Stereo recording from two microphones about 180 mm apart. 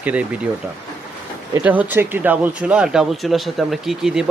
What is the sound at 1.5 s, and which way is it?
Speech, 10° right (ahead or behind).